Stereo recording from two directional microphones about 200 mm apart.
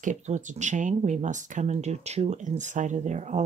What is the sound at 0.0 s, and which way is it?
Speech, 40° right (ahead or behind).